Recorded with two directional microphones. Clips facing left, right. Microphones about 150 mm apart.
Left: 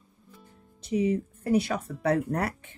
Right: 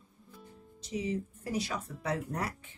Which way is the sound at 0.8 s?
55° left (ahead or behind).